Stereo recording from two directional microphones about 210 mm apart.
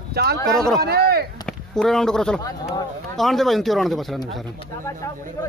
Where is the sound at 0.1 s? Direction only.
50° right (ahead or behind).